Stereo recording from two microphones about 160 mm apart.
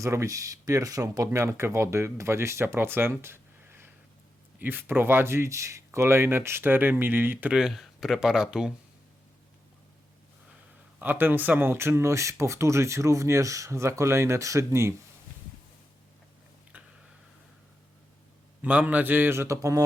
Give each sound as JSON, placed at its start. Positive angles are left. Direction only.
{"t": 0.0, "sound": "speech", "side_deg": -20}
{"t": 11.0, "sound": "speech", "side_deg": -10}
{"t": 16.7, "sound": "a sound", "side_deg": -10}
{"t": 18.6, "sound": "speech", "side_deg": -10}